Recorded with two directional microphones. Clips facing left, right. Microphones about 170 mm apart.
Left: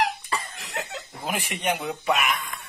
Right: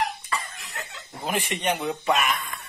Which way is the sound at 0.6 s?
75° left (ahead or behind).